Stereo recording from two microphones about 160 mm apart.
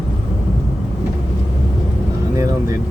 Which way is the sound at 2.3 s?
20° right (ahead or behind).